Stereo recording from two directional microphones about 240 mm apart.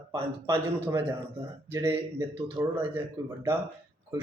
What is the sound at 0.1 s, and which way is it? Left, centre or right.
A man's voice, centre.